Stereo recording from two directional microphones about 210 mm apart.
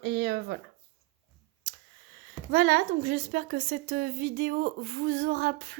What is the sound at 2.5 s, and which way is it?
A woman's voice, 45° right (ahead or behind).